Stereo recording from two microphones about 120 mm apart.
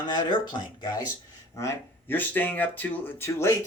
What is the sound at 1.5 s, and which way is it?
Speech, 25° left (ahead or behind).